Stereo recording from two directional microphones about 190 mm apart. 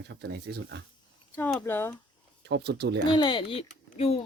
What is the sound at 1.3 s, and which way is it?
Speech, 5° left (ahead or behind).